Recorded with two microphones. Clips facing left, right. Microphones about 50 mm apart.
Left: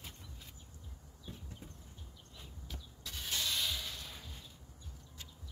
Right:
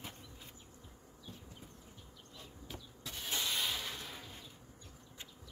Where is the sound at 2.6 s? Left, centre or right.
Centre.